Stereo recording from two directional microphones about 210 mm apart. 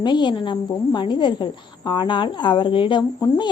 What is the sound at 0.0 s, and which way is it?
A woman's voice, 20° left (ahead or behind).